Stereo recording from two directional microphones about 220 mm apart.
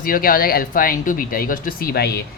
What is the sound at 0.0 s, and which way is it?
Speech, 40° left (ahead or behind).